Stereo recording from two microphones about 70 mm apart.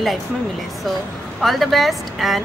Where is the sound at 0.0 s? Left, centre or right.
Centre.